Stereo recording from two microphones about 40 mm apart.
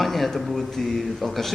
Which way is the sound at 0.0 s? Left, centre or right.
Centre.